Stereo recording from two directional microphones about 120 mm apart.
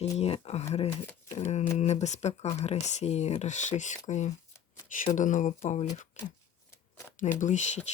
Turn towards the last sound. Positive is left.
turn(degrees=75)  # may be behind; listen again after turning